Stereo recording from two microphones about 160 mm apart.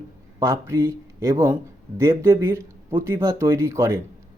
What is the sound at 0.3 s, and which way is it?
A man's voice, 20° right (ahead or behind).